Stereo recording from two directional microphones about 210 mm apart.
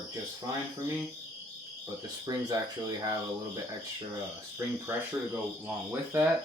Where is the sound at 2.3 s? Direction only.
15° right (ahead or behind).